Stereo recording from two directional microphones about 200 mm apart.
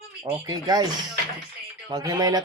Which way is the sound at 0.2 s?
20° right (ahead or behind).